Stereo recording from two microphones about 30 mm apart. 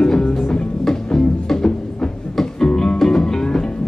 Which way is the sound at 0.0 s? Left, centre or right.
Left.